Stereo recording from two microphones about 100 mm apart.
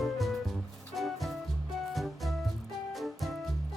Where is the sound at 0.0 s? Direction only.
Centre (ahead or behind).